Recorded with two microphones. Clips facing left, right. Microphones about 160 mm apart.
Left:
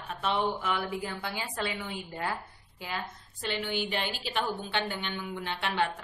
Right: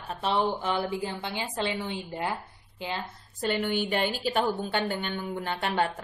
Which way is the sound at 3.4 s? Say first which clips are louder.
Right 5 dB; 45° right (ahead or behind).